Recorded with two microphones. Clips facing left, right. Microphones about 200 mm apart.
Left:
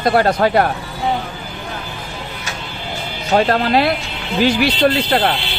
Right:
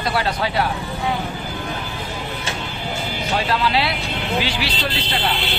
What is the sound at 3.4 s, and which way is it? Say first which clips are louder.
Speech: left 7 dB; 50° left (ahead or behind).